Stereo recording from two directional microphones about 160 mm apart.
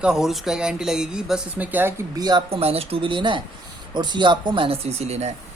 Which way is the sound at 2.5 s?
40° right (ahead or behind).